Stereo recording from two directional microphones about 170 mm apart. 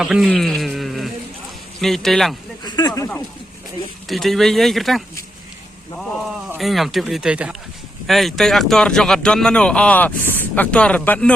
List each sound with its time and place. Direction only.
0.0 s speech: centre (ahead or behind)
2.6 s speech: 25° left (ahead or behind)
4.1 s speech: centre (ahead or behind)
6.6 s speech: centre (ahead or behind)